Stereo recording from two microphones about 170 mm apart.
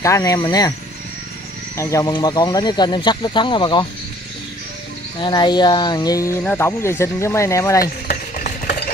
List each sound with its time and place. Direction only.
0.0 s speech: 20° left (ahead or behind)
1.8 s speech: 20° left (ahead or behind)
5.2 s speech: 25° left (ahead or behind)
7.8 s stir: 45° left (ahead or behind)